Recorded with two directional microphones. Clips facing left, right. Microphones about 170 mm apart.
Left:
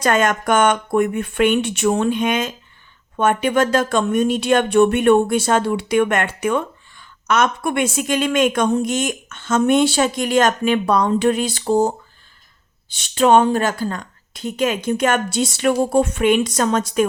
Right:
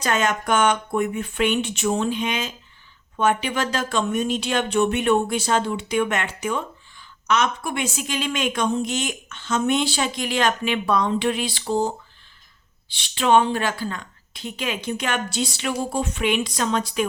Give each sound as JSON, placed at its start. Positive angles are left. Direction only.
{"t": 0.0, "sound": "speech", "side_deg": 55}